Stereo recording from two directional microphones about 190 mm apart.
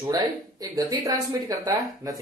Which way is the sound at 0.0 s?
20° right (ahead or behind).